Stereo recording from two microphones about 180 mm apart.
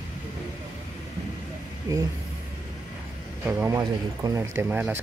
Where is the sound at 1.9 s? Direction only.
15° right (ahead or behind).